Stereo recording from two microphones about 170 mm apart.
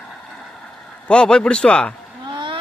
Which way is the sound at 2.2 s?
25° right (ahead or behind).